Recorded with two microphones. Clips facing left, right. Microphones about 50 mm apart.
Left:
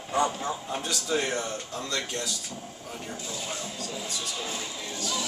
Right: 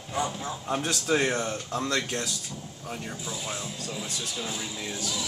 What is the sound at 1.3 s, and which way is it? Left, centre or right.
Speech, right.